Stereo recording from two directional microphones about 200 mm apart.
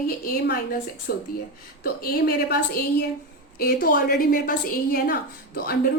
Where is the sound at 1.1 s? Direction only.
50° left (ahead or behind).